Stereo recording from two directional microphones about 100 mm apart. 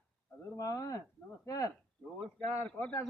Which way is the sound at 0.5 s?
35° left (ahead or behind).